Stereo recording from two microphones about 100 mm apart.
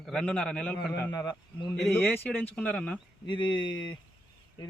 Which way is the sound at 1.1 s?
40° left (ahead or behind).